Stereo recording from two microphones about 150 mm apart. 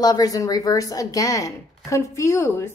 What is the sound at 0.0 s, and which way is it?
A woman's voice, 25° left (ahead or behind).